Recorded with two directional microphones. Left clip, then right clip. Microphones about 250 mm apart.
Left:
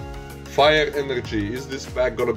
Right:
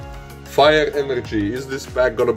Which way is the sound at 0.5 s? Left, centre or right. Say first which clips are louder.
Right 3 dB; centre.